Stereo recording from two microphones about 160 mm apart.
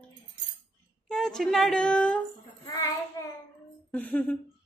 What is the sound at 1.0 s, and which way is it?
A woman's voice, 5° left (ahead or behind).